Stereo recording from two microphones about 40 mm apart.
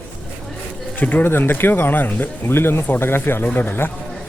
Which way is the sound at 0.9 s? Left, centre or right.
Left.